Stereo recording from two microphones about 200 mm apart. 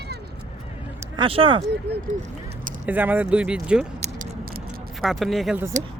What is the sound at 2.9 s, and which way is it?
Speech, 10° right (ahead or behind).